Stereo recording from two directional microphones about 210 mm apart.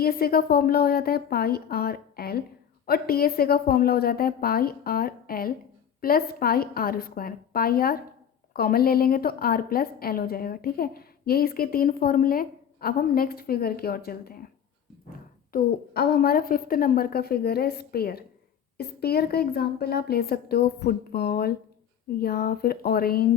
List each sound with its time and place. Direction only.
0.0 s a woman's voice: 45° left (ahead or behind)
15.5 s a woman's voice: 50° left (ahead or behind)